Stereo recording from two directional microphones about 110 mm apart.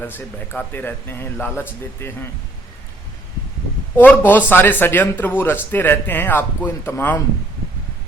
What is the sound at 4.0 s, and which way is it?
A man's voice, 15° left (ahead or behind).